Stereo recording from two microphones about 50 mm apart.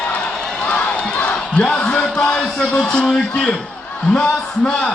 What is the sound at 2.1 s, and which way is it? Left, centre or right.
Speech, centre.